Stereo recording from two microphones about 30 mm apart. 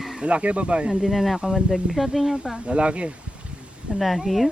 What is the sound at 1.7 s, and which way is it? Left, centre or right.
Speech, centre.